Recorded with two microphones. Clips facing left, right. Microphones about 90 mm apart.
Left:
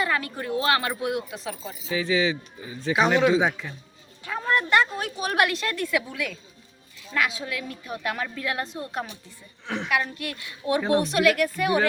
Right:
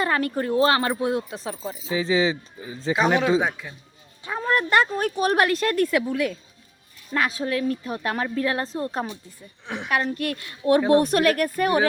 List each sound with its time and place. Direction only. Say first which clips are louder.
0.0 s speech: right 4 dB; 45° right (ahead or behind)
3.4 s a man's voice: left 2 dB; 10° right (ahead or behind)
4.2 s a sound: right 2 dB; 25° right (ahead or behind)
4.5 s speech: right 1 dB; 40° right (ahead or behind)
9.6 s a man's voice: left 2 dB; 15° right (ahead or behind)
10.2 s speech: right 6 dB; 45° right (ahead or behind)